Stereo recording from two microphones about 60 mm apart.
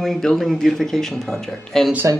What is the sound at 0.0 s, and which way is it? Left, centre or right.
Speech, centre.